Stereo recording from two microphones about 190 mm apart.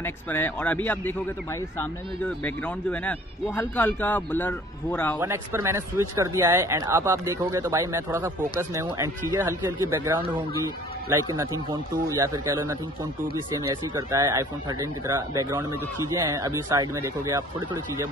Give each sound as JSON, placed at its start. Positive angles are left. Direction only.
{"t": 0.0, "sound": "a man's voice", "side_deg": 10}
{"t": 5.2, "sound": "a man's voice", "side_deg": -15}